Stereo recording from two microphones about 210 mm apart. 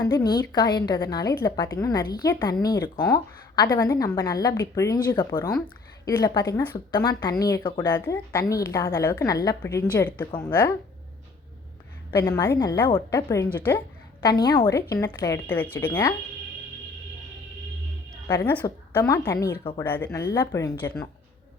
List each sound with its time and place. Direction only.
0.0 s a woman's voice: 20° left (ahead or behind)
12.1 s a woman's voice: 10° left (ahead or behind)
14.2 s a woman's voice: 20° left (ahead or behind)
18.3 s a woman's voice: 10° left (ahead or behind)